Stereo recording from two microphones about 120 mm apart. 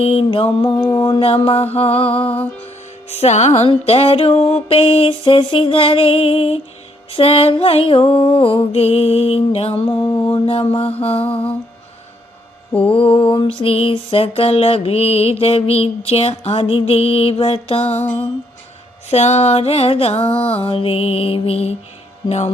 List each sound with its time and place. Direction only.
0.0 s mantra: 55° left (ahead or behind)
0.8 s mantra: 25° left (ahead or behind)
1.2 s mantra: 55° left (ahead or behind)
3.1 s mantra: 65° left (ahead or behind)
4.4 s music: 60° left (ahead or behind)
12.7 s mantra: 50° left (ahead or behind)
19.1 s mantra: 65° left (ahead or behind)